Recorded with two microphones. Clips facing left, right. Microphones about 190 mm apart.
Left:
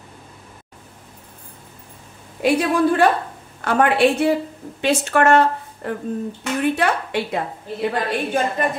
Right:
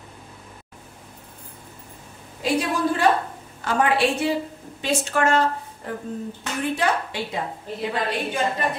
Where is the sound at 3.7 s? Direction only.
60° left (ahead or behind).